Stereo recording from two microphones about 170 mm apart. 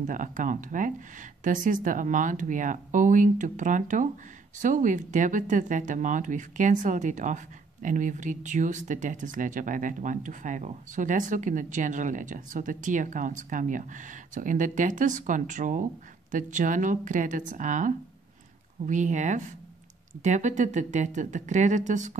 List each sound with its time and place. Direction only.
0.0 s speech: 50° right (ahead or behind)